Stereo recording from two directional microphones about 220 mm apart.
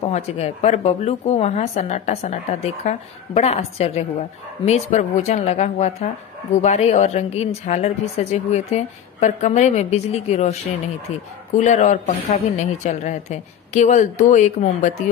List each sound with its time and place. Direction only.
0.1 s speech: 30° left (ahead or behind)
11.5 s speech: 30° left (ahead or behind)